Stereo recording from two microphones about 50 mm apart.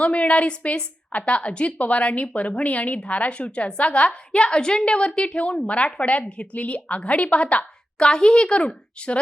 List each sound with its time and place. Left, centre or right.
0.0 s a woman's voice: left